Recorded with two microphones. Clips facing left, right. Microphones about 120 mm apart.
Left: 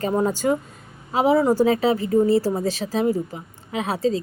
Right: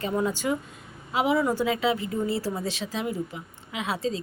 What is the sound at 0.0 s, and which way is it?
Speech, 40° left (ahead or behind).